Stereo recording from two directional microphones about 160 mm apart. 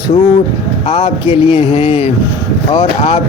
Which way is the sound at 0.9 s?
40° left (ahead or behind).